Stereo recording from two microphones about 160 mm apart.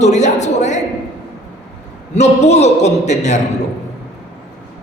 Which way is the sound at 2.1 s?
45° left (ahead or behind).